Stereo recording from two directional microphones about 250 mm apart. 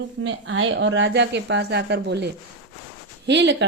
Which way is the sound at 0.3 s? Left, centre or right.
Right.